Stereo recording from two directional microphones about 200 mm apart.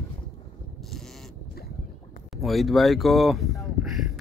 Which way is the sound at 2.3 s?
Centre (ahead or behind).